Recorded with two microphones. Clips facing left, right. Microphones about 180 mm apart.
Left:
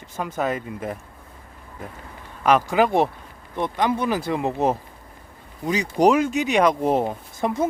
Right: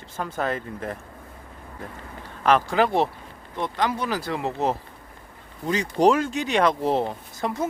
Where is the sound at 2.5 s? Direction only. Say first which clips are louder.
Left 2 dB; 10° left (ahead or behind).